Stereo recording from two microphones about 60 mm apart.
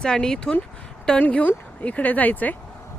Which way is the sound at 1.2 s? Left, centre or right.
Left.